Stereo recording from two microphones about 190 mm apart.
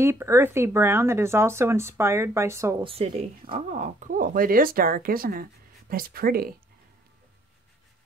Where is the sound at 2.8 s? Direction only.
30° right (ahead or behind); by 6.5 s 50° right (ahead or behind).